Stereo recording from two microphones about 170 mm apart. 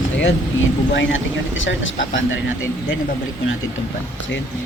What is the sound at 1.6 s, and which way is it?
Speech, 90° left.